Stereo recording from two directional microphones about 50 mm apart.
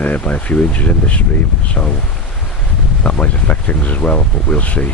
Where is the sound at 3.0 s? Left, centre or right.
Left.